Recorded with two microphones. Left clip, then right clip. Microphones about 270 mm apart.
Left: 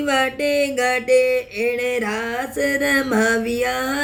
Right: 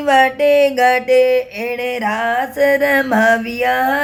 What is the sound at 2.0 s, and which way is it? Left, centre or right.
Music, centre.